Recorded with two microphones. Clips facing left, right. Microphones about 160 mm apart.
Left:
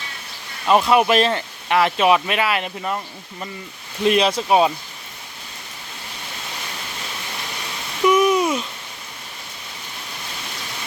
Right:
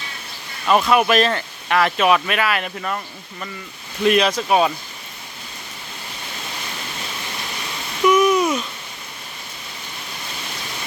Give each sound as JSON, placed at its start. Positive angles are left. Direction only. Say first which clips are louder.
{"t": 0.6, "sound": "speech", "louder": "left 1 dB", "side_deg": 25}
{"t": 4.0, "sound": "speech", "louder": "right 1 dB", "side_deg": 25}
{"t": 8.0, "sound": "a sound", "louder": "right 1 dB", "side_deg": 30}